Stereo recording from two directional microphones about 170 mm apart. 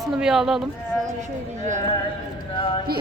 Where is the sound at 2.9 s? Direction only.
65° right (ahead or behind).